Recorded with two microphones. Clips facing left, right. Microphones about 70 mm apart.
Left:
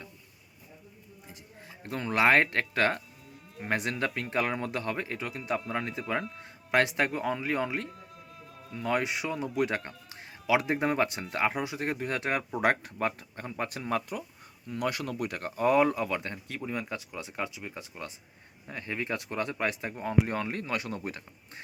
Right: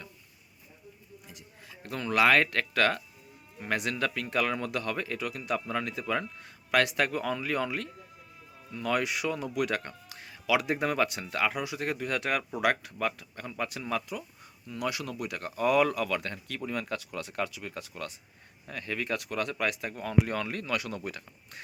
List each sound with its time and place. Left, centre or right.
1.3 s speech: left